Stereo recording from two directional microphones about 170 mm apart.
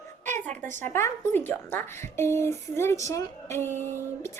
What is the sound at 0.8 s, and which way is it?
A woman's voice, 15° left (ahead or behind).